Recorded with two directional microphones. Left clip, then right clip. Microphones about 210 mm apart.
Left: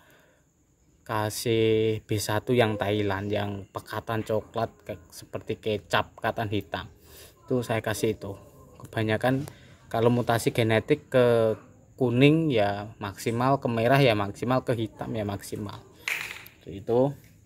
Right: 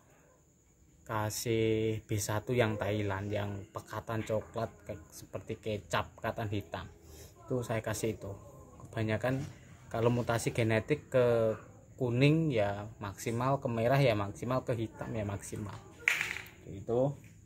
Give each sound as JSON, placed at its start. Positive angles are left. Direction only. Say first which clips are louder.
{"t": 1.0, "sound": "speech", "louder": "left 7 dB", "side_deg": 30}
{"t": 16.8, "sound": "speech", "louder": "left 7 dB", "side_deg": 40}